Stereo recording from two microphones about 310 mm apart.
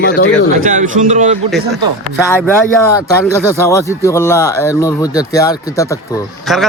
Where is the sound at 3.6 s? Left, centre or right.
Centre.